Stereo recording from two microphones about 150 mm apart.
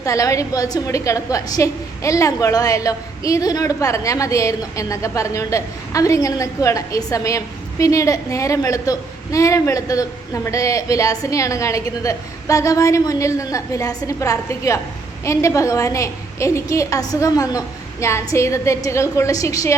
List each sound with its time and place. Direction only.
0.0 s a woman's voice: 20° left (ahead or behind)